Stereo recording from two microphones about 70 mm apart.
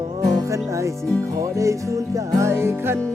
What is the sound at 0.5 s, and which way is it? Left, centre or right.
Music, right.